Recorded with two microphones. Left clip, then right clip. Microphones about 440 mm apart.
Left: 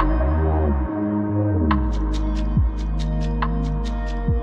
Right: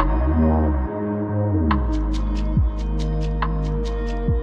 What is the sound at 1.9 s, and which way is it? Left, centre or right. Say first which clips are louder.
Music: right 1 dB; left.